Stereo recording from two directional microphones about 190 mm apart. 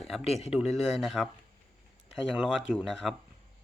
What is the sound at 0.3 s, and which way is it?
Speech, 35° left (ahead or behind).